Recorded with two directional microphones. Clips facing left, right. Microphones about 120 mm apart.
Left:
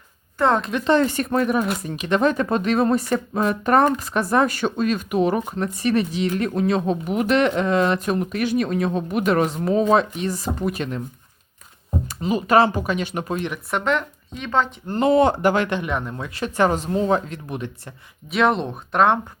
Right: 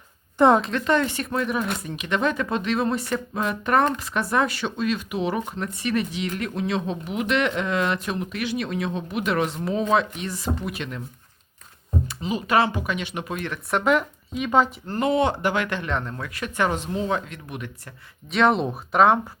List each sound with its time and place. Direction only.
0.3 s a woman's voice: 15° right (ahead or behind)
0.9 s speech: 40° left (ahead or behind)
12.0 s speech: 45° left (ahead or behind)
13.7 s speech: 5° right (ahead or behind)
14.8 s speech: 25° left (ahead or behind)
15.1 s speech: 40° left (ahead or behind)
15.6 s speech: 20° left (ahead or behind)
16.2 s speech: 30° left (ahead or behind)
18.3 s speech: centre (ahead or behind)